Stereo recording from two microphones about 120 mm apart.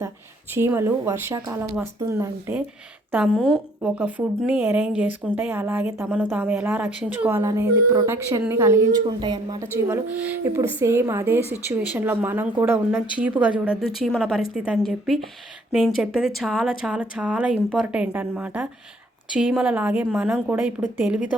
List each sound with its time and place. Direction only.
0.5 s a woman's voice: 20° right (ahead or behind)
3.8 s a woman's voice: 10° right (ahead or behind); by 9.6 s 35° right (ahead or behind)
9.6 s a woman's voice: 20° right (ahead or behind)
10.8 s a woman's voice: 25° right (ahead or behind)
13.8 s speech: centre (ahead or behind)